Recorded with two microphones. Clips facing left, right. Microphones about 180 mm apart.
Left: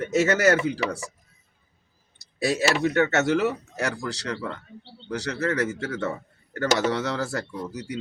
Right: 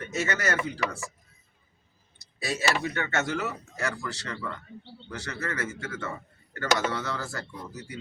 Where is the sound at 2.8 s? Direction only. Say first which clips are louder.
Left 10 dB; 40° left (ahead or behind).